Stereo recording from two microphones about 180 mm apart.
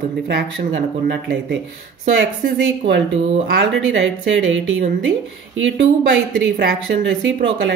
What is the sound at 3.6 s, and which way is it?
A woman's voice, 90° right.